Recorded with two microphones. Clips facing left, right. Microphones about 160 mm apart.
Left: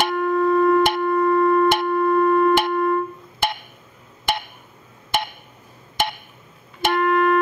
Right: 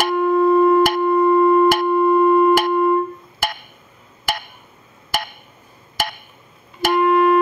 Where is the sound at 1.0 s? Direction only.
20° right (ahead or behind).